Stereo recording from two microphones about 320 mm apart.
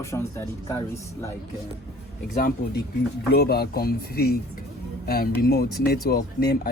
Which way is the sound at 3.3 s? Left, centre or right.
Left.